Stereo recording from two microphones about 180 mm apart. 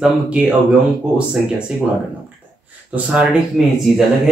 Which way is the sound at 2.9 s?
5° right (ahead or behind).